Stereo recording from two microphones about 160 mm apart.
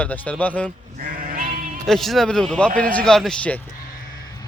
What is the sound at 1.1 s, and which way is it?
Sheep, 60° right (ahead or behind).